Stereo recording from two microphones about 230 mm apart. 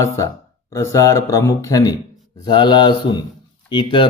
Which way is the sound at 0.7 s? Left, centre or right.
Centre.